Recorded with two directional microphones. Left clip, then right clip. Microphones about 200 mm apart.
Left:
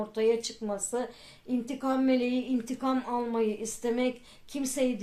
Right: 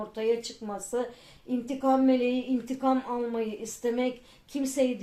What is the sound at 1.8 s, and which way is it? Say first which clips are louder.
A woman's voice: right 4 dB; 45° left (ahead or behind).